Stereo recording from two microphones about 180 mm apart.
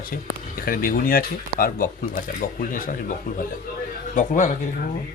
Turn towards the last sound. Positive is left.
turn(degrees=45)  # may be behind; listen again after turning